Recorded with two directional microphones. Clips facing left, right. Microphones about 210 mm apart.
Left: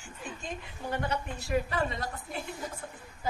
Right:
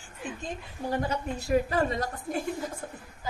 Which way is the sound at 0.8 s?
35° right (ahead or behind).